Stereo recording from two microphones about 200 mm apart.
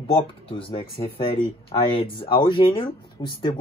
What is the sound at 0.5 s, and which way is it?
Speech, 25° left (ahead or behind).